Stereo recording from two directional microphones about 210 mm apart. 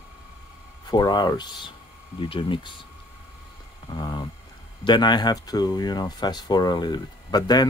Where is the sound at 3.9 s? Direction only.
20° left (ahead or behind).